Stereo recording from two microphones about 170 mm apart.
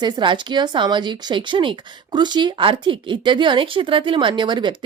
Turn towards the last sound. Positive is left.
turn(degrees=-25)  # may be behind; listen again after turning